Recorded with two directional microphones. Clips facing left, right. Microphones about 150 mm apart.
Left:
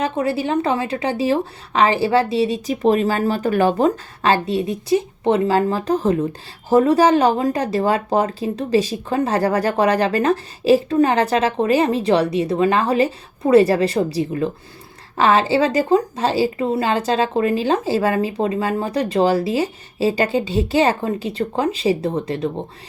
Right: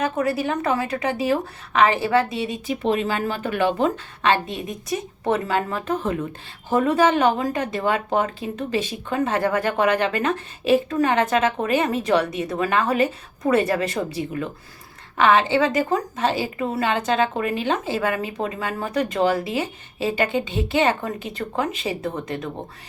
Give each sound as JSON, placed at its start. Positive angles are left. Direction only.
{"t": 0.0, "sound": "speech", "side_deg": 30}